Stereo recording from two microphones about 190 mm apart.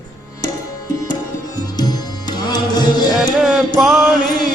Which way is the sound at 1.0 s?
20° left (ahead or behind).